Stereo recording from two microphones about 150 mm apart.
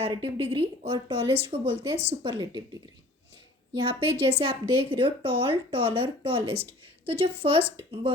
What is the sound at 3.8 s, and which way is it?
A woman's voice, 35° right (ahead or behind).